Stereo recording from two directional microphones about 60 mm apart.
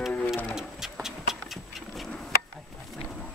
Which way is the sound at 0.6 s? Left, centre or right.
Centre.